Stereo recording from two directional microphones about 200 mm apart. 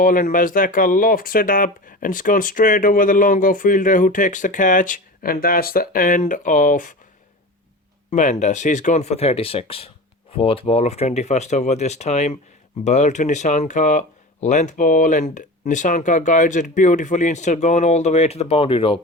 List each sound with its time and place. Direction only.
0.0 s speech: 45° left (ahead or behind)
8.1 s speech: 35° left (ahead or behind)